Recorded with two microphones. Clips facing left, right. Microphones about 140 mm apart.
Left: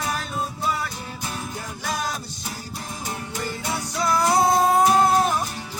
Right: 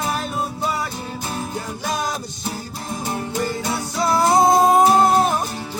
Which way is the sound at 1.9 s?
20° right (ahead or behind).